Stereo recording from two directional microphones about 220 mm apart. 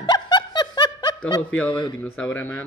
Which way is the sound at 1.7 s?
20° left (ahead or behind).